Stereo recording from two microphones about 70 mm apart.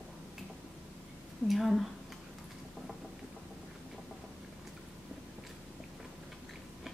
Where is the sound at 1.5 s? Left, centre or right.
Centre.